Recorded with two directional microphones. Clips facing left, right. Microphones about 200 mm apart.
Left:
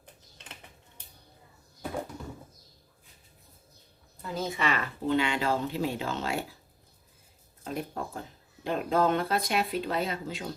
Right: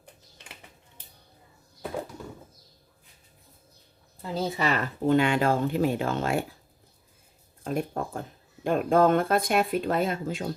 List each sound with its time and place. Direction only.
4.2 s speech: 30° right (ahead or behind); by 6.4 s 55° right (ahead or behind)
7.6 s speech: 50° right (ahead or behind)